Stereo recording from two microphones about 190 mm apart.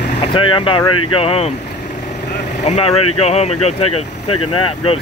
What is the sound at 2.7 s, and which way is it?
Speech, 30° left (ahead or behind).